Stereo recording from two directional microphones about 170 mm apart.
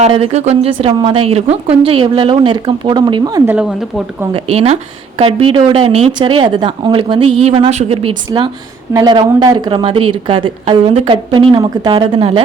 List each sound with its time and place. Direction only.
0.0 s a woman's voice: 35° right (ahead or behind)
3.4 s speech: 5° right (ahead or behind)
4.4 s a woman's voice: 35° right (ahead or behind)
8.9 s a woman's voice: 20° right (ahead or behind)